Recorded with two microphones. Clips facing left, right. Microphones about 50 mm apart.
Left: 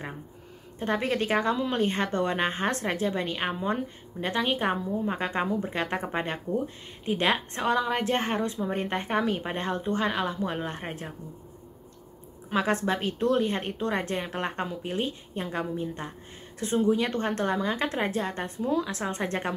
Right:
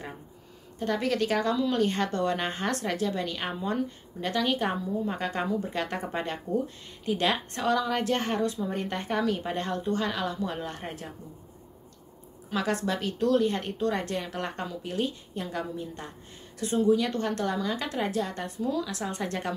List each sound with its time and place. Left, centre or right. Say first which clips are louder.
0.7 s a woman's voice: even; left
12.4 s a woman's voice: left 3 dB; left